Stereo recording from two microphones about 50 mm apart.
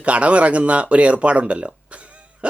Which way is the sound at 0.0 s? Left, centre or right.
Right.